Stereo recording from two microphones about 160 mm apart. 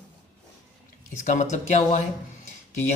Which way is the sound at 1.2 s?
50° left (ahead or behind).